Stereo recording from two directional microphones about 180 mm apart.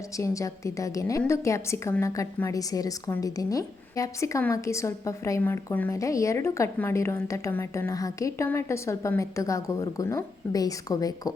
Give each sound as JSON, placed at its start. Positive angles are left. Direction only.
{"t": 0.2, "sound": "a woman's voice", "side_deg": 15}